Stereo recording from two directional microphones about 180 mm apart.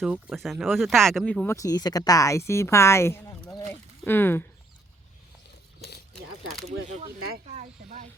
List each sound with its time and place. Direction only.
0.0 s speech: 5° right (ahead or behind)
1.5 s speech: 20° left (ahead or behind)
7.5 s speech: 40° right (ahead or behind)